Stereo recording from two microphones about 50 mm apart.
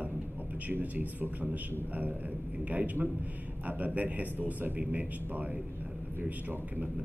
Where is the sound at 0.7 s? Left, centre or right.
Right.